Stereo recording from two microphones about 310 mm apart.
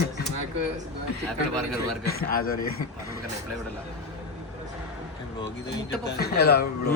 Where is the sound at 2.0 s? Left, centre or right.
Left.